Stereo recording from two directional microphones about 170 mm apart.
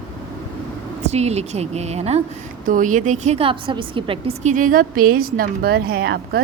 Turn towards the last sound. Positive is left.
turn(degrees=-70)  # may be behind; listen again after turning